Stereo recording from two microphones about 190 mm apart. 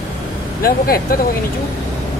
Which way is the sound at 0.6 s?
50° left (ahead or behind).